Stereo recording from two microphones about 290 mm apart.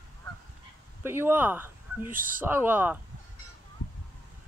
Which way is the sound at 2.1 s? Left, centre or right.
Right.